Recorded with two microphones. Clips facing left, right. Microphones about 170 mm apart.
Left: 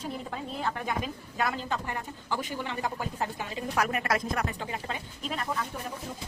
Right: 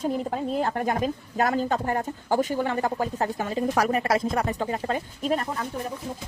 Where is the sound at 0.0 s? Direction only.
45° right (ahead or behind).